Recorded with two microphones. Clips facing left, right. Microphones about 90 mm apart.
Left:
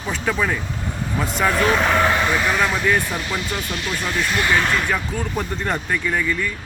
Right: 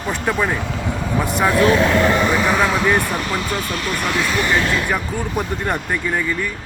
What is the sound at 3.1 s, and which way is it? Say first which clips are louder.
Speech: right 3 dB; 45° right (ahead or behind).